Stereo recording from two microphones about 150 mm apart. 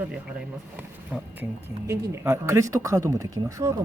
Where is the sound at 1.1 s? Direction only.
5° right (ahead or behind).